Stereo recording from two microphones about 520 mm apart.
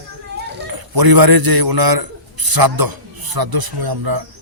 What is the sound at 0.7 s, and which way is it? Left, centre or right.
A man's voice, right.